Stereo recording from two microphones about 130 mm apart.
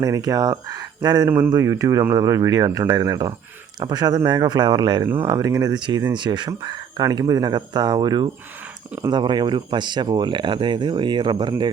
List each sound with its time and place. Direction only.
0.0 s speech: 25° right (ahead or behind)